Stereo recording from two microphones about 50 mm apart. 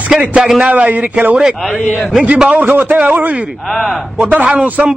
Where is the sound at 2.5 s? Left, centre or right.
Right.